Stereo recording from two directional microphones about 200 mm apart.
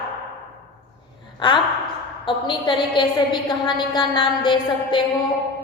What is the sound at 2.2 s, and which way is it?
A woman's voice, 25° left (ahead or behind).